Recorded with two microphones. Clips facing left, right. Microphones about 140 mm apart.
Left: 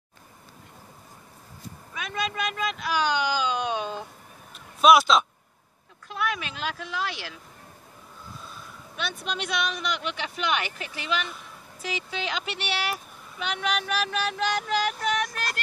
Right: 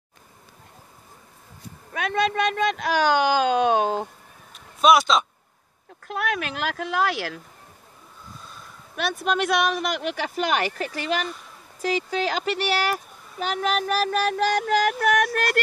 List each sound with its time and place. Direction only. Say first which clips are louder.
1.9 s a woman's voice: right 8 dB; 60° right (ahead or behind)
2.3 s speech: right 7 dB; 40° right (ahead or behind)
4.6 s a sound: even; centre (ahead or behind)
6.0 s speech: right 3 dB; 55° right (ahead or behind)
8.9 s speech: right 8 dB; 50° right (ahead or behind)